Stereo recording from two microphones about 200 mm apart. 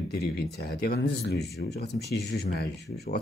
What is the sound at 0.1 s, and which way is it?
Speech, 55° left (ahead or behind).